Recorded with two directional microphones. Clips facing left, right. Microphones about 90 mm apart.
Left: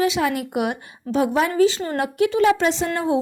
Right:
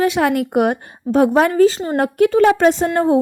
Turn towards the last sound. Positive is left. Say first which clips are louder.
# right 6 dB
turn(degrees=-45)  # may be behind; listen again after turning